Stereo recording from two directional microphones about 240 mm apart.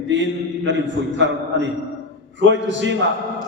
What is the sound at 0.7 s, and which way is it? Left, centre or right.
A man's voice, right.